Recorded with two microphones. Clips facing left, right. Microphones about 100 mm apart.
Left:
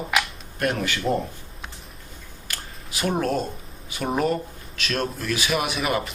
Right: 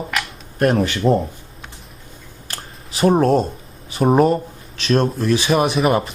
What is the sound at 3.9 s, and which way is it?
Speech, 35° right (ahead or behind).